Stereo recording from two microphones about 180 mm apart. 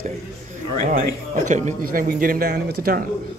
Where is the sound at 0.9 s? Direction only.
45° right (ahead or behind).